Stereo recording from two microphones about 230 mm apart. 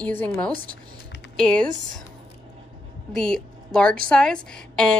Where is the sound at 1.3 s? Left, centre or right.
Centre.